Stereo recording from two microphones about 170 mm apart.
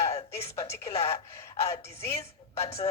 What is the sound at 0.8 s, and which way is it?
Speech, 35° left (ahead or behind).